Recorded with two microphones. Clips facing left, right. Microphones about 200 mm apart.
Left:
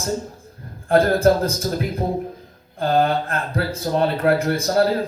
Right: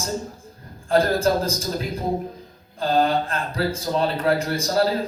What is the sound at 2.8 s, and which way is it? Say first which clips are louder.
Speech: left 1 dB; 60° left (ahead or behind).